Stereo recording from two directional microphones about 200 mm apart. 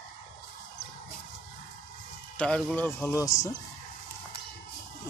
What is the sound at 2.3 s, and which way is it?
Speech, 5° left (ahead or behind).